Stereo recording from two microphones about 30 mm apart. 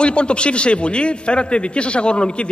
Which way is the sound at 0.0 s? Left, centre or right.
Left.